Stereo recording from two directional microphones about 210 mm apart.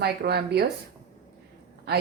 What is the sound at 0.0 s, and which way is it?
Speech, 50° right (ahead or behind).